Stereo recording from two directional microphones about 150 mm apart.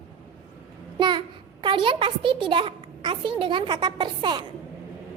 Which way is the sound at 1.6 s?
35° right (ahead or behind).